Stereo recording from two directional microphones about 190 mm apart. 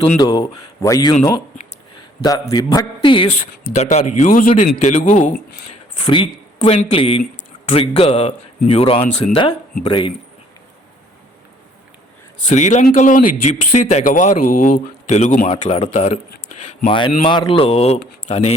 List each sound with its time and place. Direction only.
0.2 s speech: 20° left (ahead or behind)
2.2 s speech: 20° left (ahead or behind)
3.8 s a man's voice: 40° left (ahead or behind)
6.6 s a man's voice: 35° left (ahead or behind)
12.5 s a man's voice: 40° left (ahead or behind)
16.8 s a man's voice: 25° left (ahead or behind)